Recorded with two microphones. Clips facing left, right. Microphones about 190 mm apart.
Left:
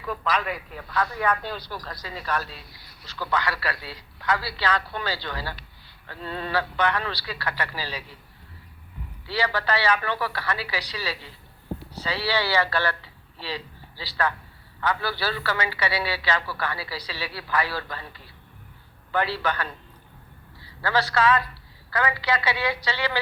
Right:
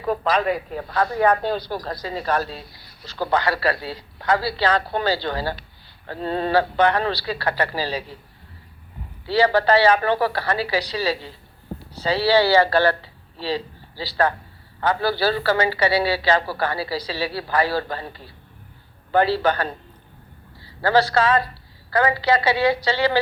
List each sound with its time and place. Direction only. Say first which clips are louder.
0.0 s speech: right 7 dB; 35° right (ahead or behind)
9.2 s speech: right 9 dB; 30° right (ahead or behind)
20.8 s speech: right 4 dB; 35° right (ahead or behind)